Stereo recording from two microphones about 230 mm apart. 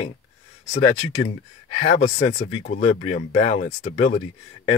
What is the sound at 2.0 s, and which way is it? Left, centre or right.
Speech, left.